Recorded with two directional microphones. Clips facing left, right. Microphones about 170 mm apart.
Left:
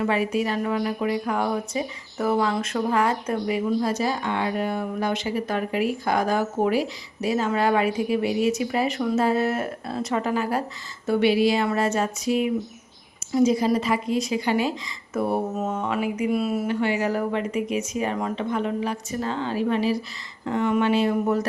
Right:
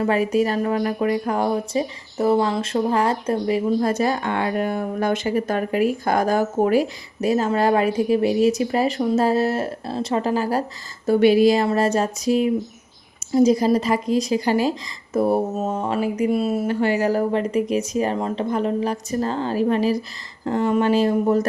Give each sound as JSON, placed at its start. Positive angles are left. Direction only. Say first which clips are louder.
{"t": 0.0, "sound": "a woman's voice", "louder": "right 4 dB", "side_deg": -40}
{"t": 3.8, "sound": "a woman's voice", "louder": "right 4 dB", "side_deg": -55}